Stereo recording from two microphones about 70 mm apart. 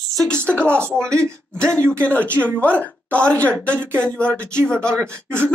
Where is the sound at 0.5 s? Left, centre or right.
Right.